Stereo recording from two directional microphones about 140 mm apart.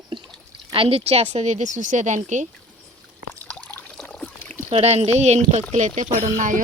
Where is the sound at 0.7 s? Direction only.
40° right (ahead or behind); by 2.5 s 60° right (ahead or behind).